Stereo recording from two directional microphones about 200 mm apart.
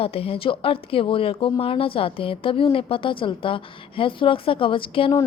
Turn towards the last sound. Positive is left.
turn(degrees=25)  # may be behind; listen again after turning